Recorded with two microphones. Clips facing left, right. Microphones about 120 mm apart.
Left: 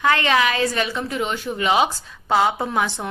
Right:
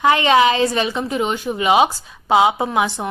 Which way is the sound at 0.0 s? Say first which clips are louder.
Right 5 dB; 20° right (ahead or behind).